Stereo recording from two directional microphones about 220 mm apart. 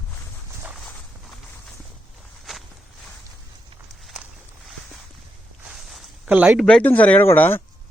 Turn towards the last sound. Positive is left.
turn(degrees=10)  # may be behind; listen again after turning